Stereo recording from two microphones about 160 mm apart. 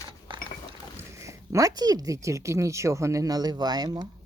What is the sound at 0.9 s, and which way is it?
Speech, 20° right (ahead or behind).